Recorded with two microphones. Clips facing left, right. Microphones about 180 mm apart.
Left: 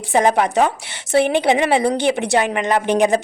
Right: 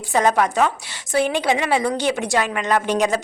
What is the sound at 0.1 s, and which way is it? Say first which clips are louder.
A woman's voice: left 2 dB; 25° left (ahead or behind).